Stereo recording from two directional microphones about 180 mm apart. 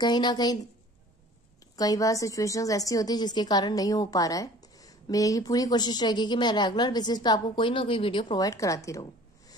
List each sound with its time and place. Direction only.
0.0 s a woman's voice: 25° left (ahead or behind)
1.8 s a woman's voice: 20° left (ahead or behind)